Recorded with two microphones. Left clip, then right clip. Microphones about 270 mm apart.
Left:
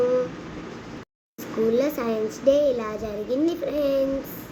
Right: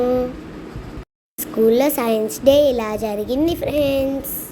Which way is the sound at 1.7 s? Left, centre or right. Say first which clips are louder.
Right 6 dB; right.